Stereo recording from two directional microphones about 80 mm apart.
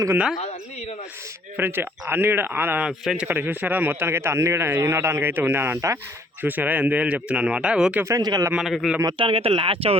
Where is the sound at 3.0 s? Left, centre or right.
Centre.